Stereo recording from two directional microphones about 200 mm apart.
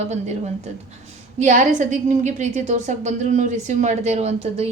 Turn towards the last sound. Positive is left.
turn(degrees=-30)  # may be behind; listen again after turning